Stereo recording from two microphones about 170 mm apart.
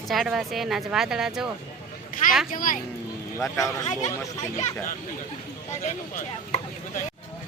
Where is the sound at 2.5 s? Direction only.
55° left (ahead or behind).